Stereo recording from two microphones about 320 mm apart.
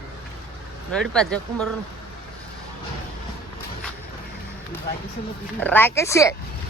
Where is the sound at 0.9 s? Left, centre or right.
Centre.